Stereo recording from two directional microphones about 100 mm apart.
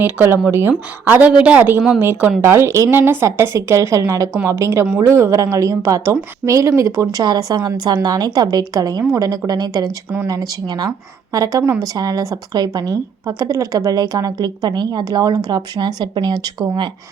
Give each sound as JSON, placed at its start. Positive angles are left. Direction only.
{"t": 0.0, "sound": "a woman's voice", "side_deg": -20}